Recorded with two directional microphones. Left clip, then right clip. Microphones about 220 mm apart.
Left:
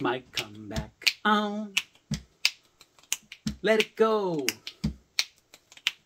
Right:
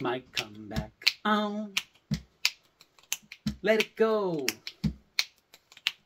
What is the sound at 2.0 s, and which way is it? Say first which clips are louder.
Finger snapping: left 2 dB; centre (ahead or behind).